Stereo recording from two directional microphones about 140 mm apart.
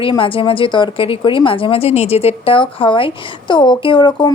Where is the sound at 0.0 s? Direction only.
40° left (ahead or behind).